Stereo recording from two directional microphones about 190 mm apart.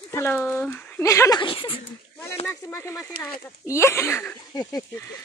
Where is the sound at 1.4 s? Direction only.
25° left (ahead or behind).